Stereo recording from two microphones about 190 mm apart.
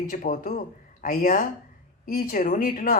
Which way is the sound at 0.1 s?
45° left (ahead or behind).